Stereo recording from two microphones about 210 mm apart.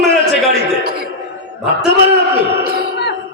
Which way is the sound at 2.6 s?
45° right (ahead or behind).